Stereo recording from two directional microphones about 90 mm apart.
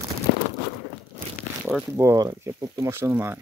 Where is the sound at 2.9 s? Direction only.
30° right (ahead or behind).